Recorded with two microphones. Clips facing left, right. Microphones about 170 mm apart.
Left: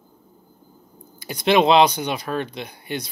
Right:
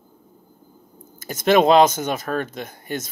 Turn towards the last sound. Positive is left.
turn(degrees=-45)  # may be behind; listen again after turning